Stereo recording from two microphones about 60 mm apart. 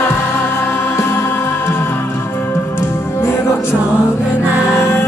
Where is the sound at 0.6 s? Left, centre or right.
Left.